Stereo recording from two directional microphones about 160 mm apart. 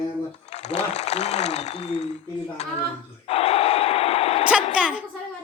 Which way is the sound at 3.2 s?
40° left (ahead or behind).